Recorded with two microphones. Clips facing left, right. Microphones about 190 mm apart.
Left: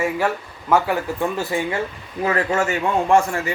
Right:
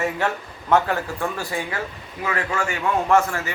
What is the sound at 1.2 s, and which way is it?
Speech, 20° left (ahead or behind).